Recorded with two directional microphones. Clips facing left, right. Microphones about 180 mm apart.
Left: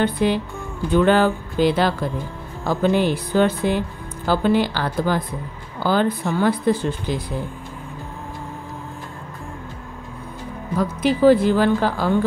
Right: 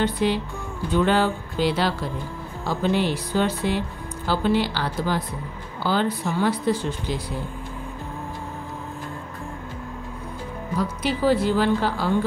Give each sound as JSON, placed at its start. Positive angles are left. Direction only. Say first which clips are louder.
{"t": 0.0, "sound": "speech", "louder": "left 3 dB", "side_deg": 50}
{"t": 10.8, "sound": "speech", "louder": "left 7 dB", "side_deg": 50}